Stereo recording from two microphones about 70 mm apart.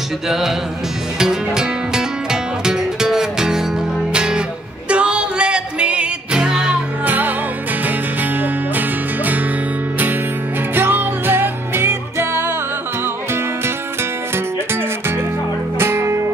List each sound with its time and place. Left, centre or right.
0.3 s music: centre
7.1 s music: right
10.7 s music: right
14.3 s music: right